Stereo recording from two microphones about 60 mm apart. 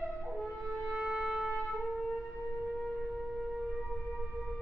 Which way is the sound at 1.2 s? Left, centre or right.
Centre.